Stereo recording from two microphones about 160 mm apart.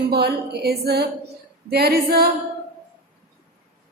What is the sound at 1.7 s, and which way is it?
Speech, 75° right (ahead or behind).